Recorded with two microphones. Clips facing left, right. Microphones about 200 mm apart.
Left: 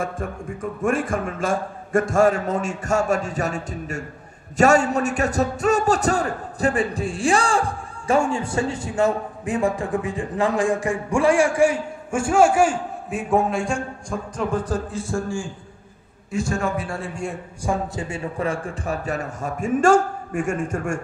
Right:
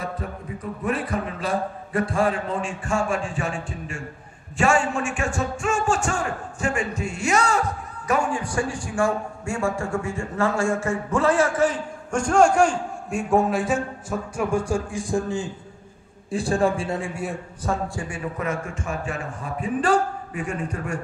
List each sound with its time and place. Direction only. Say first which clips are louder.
0.0 s a man's voice: left 4 dB; 50° left (ahead or behind); by 15.5 s 20° right (ahead or behind)
16.3 s a man's voice: right 2 dB; 35° right (ahead or behind)
17.0 s a man's voice: even; 5° right (ahead or behind)
17.6 s a man's voice: left 3 dB; 15° left (ahead or behind); by 21.0 s 45° left (ahead or behind)